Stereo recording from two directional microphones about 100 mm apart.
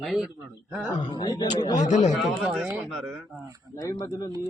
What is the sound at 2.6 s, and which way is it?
Speech, 15° right (ahead or behind).